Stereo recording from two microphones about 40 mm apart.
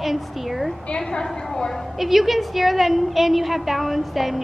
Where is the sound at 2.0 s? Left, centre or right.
Centre.